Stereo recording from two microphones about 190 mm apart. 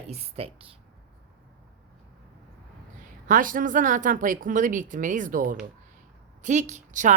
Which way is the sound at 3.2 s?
45° right (ahead or behind).